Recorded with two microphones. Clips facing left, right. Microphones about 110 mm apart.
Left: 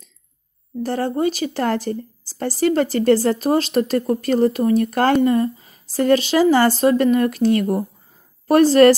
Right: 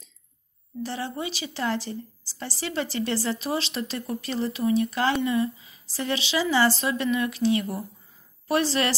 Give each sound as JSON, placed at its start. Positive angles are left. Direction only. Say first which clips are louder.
{"t": 0.8, "sound": "a woman's voice", "louder": "left 11 dB", "side_deg": 50}